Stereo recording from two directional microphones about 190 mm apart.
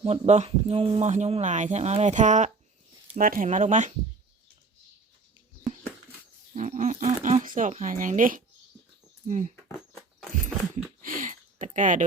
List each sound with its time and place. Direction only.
0.0 s speech: 35° right (ahead or behind)
6.5 s speech: 40° right (ahead or behind)
11.0 s a sound: 45° right (ahead or behind)